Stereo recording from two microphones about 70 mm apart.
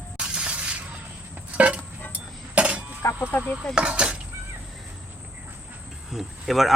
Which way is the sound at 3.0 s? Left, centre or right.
Left.